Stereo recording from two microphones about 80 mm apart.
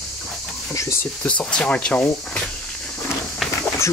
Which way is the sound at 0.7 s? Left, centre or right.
Left.